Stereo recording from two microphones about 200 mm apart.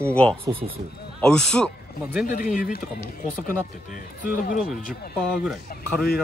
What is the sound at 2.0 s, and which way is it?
Speech, 10° right (ahead or behind).